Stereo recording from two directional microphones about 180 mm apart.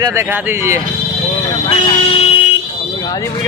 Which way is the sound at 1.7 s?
30° left (ahead or behind).